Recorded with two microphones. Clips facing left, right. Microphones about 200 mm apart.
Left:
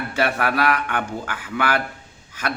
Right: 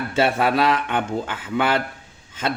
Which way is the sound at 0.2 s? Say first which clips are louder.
Right 3 dB; 25° right (ahead or behind).